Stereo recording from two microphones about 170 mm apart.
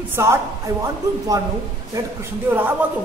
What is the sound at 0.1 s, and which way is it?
Speech, 15° right (ahead or behind).